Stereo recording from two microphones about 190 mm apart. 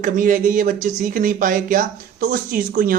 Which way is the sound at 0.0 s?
45° right (ahead or behind).